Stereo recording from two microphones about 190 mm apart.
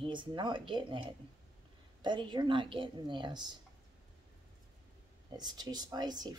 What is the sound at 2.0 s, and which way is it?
Speech, 25° right (ahead or behind).